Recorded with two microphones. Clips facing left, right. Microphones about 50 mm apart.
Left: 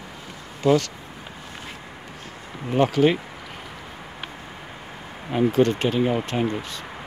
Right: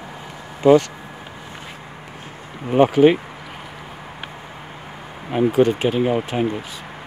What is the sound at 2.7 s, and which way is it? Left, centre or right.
Speech, centre.